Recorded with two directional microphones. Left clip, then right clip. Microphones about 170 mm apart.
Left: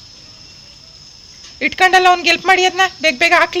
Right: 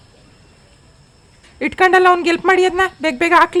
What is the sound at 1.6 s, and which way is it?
Speech, 25° right (ahead or behind).